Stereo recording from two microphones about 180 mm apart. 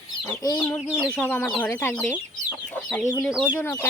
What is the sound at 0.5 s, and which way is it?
Speech, 5° left (ahead or behind).